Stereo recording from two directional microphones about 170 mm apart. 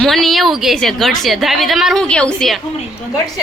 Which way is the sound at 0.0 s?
Centre (ahead or behind).